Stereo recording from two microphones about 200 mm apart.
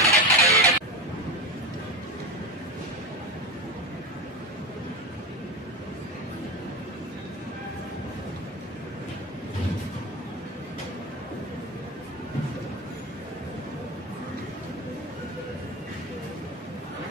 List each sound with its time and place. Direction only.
0.0 s vehicle: 15° right (ahead or behind)